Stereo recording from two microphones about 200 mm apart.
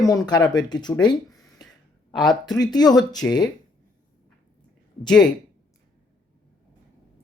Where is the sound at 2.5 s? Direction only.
20° left (ahead or behind).